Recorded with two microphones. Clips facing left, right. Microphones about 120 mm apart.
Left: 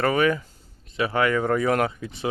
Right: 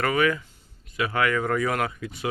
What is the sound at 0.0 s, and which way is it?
Speech, 30° left (ahead or behind).